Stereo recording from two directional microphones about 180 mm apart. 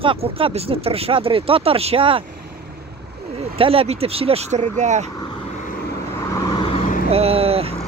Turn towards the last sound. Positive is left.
turn(degrees=-35)  # may be behind; listen again after turning